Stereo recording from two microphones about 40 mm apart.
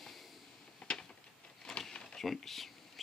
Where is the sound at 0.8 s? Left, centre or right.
Centre.